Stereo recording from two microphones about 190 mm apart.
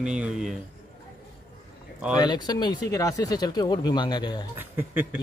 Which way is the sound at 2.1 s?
20° left (ahead or behind).